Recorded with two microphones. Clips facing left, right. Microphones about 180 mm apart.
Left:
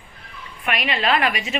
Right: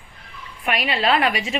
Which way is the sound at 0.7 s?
35° right (ahead or behind).